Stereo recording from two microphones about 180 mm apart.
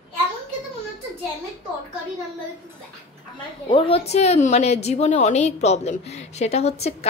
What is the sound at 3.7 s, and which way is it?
A woman's voice, 30° left (ahead or behind).